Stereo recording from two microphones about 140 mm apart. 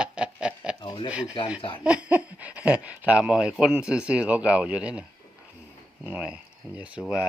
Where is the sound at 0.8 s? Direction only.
30° left (ahead or behind).